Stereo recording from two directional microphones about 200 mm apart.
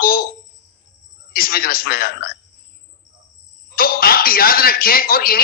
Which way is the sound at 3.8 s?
45° left (ahead or behind).